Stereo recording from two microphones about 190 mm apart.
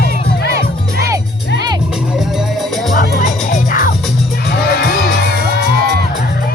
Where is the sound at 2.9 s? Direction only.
45° left (ahead or behind).